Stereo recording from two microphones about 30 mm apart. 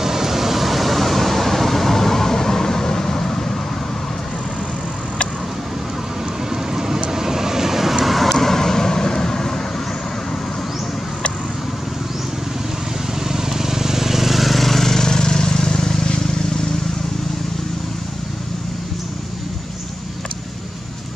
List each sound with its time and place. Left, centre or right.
0.0 s vehicle: centre
6.5 s vehicle: centre
13.3 s vehicle: centre